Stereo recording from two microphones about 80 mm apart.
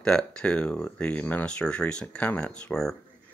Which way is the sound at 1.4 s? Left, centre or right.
Centre.